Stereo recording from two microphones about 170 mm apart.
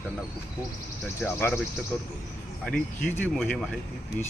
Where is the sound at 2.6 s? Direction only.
5° left (ahead or behind).